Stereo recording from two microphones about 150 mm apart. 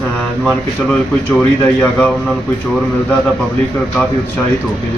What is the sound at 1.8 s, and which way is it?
Speech, 10° left (ahead or behind).